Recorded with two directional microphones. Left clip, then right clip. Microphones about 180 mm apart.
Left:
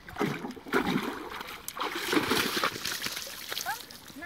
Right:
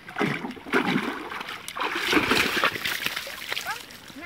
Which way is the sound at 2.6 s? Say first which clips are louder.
Right 6 dB; 20° left (ahead or behind).